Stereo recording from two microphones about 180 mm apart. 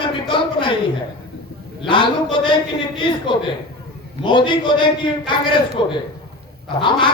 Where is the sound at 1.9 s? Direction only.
25° left (ahead or behind).